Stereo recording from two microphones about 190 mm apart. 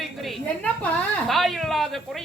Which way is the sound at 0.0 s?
5° left (ahead or behind).